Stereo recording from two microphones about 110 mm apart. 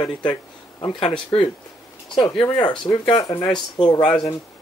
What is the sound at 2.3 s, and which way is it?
Speech, 40° left (ahead or behind).